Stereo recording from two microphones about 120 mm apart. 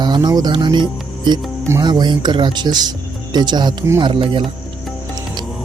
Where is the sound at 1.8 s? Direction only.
35° right (ahead or behind).